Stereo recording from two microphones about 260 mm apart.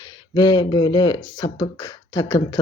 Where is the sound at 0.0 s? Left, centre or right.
Centre.